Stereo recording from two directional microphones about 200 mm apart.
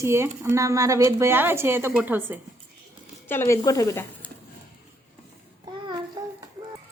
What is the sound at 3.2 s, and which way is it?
Speech, 10° left (ahead or behind).